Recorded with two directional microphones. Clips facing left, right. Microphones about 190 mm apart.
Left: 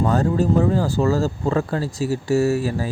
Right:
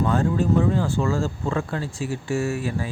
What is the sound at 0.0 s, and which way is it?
Speech, 40° left (ahead or behind).